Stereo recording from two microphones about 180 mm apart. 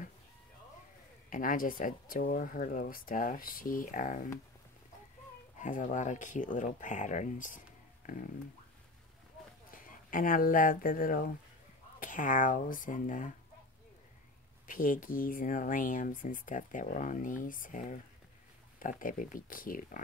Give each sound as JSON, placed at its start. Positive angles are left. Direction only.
{"t": 1.3, "sound": "speech", "side_deg": 50}
{"t": 5.6, "sound": "speech", "side_deg": 45}
{"t": 9.7, "sound": "speech", "side_deg": 50}
{"t": 14.7, "sound": "speech", "side_deg": 50}